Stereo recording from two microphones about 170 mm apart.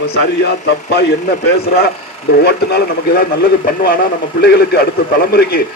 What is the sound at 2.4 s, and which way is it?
A man's voice, 75° left (ahead or behind).